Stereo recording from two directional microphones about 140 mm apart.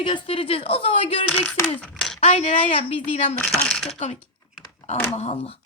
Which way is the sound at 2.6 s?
40° left (ahead or behind).